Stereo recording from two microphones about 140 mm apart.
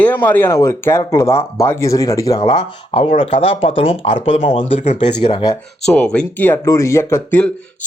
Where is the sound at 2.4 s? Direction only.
35° left (ahead or behind).